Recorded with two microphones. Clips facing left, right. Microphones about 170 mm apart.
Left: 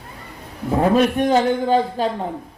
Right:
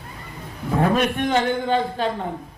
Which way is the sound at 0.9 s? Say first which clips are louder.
Left 4 dB; 35° left (ahead or behind).